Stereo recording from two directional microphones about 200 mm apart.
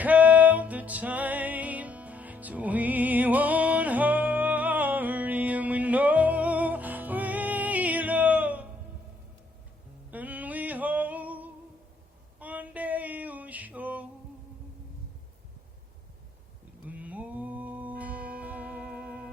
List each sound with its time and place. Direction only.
0.0 s music: 10° right (ahead or behind)
10.1 s a sound: 10° right (ahead or behind)
16.9 s music: 5° right (ahead or behind)
18.9 s music: 50° right (ahead or behind)